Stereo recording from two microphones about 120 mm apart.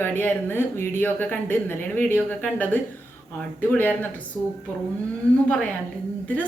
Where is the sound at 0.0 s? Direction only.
15° left (ahead or behind).